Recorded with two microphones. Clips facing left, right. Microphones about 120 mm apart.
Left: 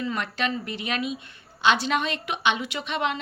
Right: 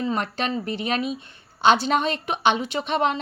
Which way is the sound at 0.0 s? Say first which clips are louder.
Right 3 dB; 35° right (ahead or behind).